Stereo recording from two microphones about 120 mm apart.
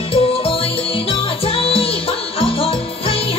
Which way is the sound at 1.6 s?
50° left (ahead or behind).